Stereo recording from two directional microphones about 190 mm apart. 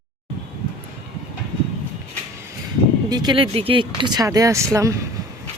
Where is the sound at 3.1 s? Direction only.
25° right (ahead or behind).